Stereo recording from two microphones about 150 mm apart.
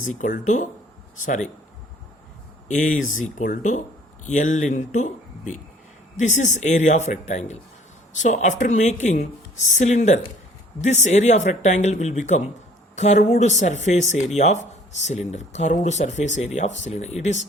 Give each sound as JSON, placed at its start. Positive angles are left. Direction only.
{"t": 0.0, "sound": "speech", "side_deg": 55}
{"t": 2.6, "sound": "speech", "side_deg": 55}